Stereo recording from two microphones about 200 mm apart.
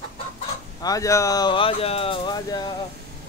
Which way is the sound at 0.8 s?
15° left (ahead or behind).